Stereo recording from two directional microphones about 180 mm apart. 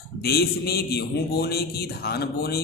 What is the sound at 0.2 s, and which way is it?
A man's voice, 60° left (ahead or behind).